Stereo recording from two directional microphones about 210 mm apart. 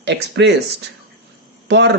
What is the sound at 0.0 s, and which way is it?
Speech, 55° right (ahead or behind).